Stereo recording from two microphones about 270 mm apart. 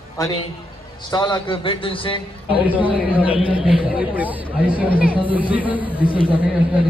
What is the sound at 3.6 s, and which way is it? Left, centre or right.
Speech, centre.